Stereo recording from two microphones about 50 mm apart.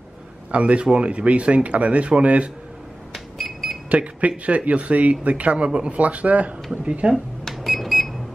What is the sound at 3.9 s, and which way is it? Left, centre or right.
Speech, right.